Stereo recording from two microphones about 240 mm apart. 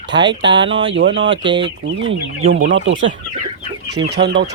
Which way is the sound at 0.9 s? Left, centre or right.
Right.